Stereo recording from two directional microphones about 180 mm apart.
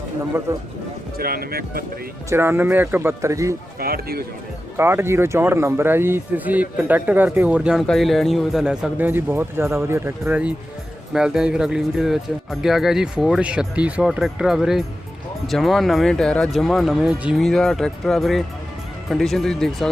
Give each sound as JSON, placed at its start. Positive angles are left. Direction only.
{"t": 1.2, "sound": "speech", "side_deg": -55}
{"t": 2.3, "sound": "speech", "side_deg": -15}
{"t": 3.8, "sound": "speech", "side_deg": -55}
{"t": 4.8, "sound": "speech", "side_deg": -15}